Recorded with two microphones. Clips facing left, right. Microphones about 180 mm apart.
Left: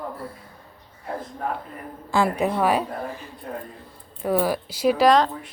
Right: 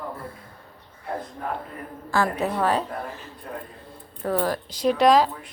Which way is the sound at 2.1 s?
15° left (ahead or behind).